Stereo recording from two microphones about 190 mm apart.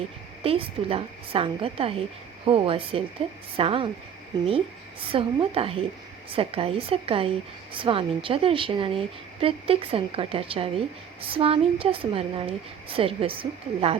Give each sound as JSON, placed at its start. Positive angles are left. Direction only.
{"t": 0.4, "sound": "a woman's voice", "side_deg": -30}